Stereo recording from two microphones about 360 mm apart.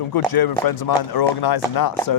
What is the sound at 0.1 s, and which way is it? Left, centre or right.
Speech, left.